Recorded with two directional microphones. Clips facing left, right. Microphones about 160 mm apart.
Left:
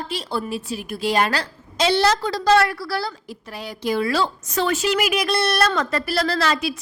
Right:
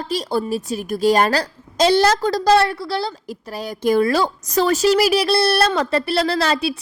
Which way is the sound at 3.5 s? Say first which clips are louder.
Right 6 dB; 45° right (ahead or behind).